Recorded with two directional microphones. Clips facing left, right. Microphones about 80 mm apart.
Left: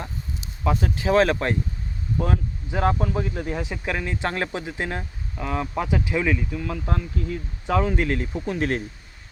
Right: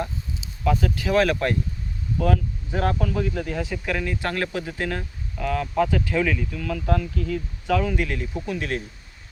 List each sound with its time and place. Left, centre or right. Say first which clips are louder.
0.6 s speech: right 1 dB; left